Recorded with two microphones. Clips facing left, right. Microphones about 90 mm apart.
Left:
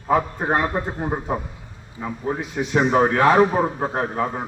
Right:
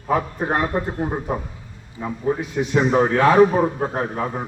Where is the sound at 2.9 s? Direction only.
25° left (ahead or behind).